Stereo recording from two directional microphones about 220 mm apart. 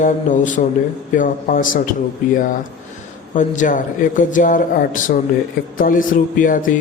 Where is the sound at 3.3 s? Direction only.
35° left (ahead or behind).